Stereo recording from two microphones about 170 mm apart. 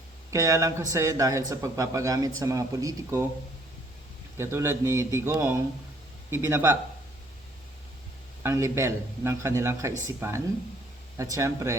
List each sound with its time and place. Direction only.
0.3 s a man's voice: 20° right (ahead or behind)
4.4 s speech: 15° right (ahead or behind)
8.4 s speech: 15° right (ahead or behind)